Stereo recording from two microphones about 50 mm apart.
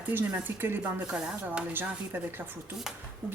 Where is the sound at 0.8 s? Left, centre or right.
Right.